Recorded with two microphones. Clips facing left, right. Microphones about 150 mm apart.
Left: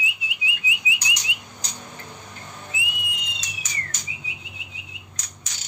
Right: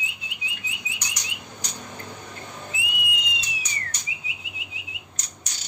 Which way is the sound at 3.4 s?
90° left.